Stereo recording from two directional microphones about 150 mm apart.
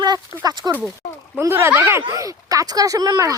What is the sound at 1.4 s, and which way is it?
Speech, 15° right (ahead or behind).